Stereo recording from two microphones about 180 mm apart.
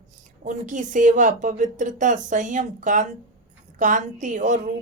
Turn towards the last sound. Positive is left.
turn(degrees=-45)  # may be behind; listen again after turning